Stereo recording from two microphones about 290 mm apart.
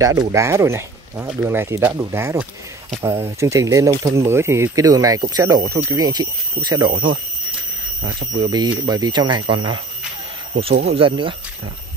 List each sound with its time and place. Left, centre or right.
0.0 s speech: centre
8.0 s speech: centre
10.9 s speech: centre